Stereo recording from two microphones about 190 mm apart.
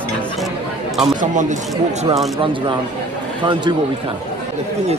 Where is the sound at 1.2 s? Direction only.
40° right (ahead or behind); by 4.1 s 25° right (ahead or behind).